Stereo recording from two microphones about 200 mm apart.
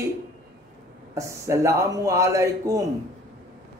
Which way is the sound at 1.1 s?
15° right (ahead or behind).